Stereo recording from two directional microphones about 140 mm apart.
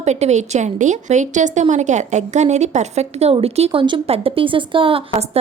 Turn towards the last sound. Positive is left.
turn(degrees=-40)  # may be behind; listen again after turning